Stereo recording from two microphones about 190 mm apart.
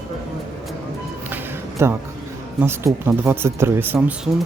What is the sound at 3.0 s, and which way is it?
Speech, 10° right (ahead or behind).